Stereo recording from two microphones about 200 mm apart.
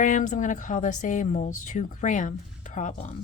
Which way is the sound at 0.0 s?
40° left (ahead or behind).